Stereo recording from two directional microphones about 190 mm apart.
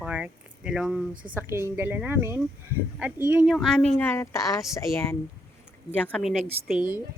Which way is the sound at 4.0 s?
15° left (ahead or behind).